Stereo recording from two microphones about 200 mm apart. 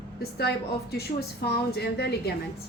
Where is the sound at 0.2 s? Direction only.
55° left (ahead or behind).